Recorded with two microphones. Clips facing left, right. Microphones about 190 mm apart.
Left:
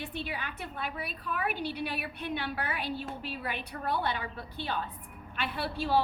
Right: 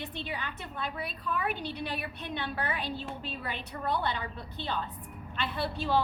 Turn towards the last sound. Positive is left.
turn(degrees=5)  # may be behind; listen again after turning